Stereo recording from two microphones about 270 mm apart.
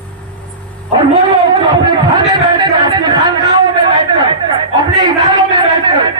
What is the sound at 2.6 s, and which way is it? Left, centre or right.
A man's voice, centre.